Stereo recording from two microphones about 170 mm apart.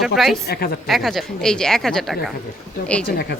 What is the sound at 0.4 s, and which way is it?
Speech, 65° left (ahead or behind).